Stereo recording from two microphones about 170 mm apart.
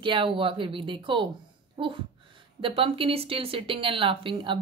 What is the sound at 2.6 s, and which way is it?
Speech, 30° right (ahead or behind).